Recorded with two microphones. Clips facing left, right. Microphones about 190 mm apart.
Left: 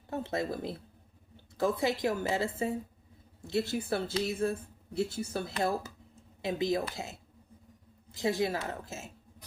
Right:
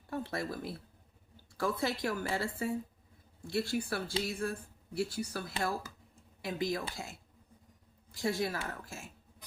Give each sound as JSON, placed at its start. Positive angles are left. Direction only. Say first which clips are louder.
{"t": 0.1, "sound": "a woman's voice", "louder": "left 4 dB", "side_deg": 20}